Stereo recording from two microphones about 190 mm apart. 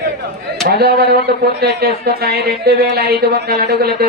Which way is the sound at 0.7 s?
55° right (ahead or behind).